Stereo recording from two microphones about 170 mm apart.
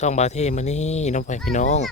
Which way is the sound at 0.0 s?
45° left (ahead or behind).